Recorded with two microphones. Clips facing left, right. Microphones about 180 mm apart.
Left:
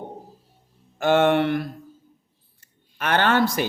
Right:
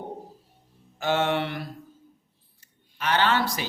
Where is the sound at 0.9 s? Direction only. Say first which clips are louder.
Left 7 dB; 55° left (ahead or behind).